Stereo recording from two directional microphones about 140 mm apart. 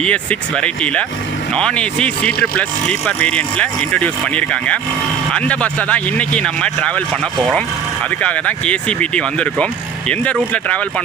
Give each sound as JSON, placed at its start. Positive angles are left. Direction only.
{"t": 0.0, "sound": "speech", "side_deg": 10}
{"t": 8.2, "sound": "speech", "side_deg": 10}